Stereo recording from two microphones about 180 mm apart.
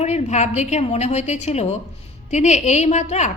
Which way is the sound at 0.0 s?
40° left (ahead or behind).